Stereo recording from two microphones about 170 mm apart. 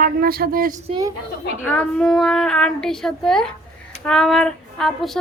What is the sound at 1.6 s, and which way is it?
Speech, 5° left (ahead or behind).